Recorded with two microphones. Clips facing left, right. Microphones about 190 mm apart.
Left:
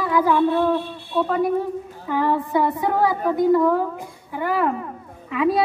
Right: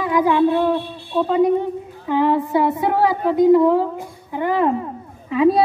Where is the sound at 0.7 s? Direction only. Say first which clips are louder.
Right 1 dB; 20° right (ahead or behind).